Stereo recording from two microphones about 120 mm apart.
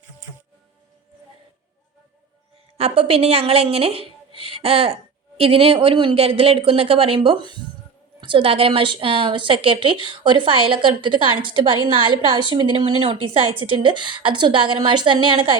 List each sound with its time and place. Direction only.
2.7 s a woman's voice: 55° right (ahead or behind)
4.4 s a sound: 55° right (ahead or behind)
5.4 s a woman's voice: 50° right (ahead or behind)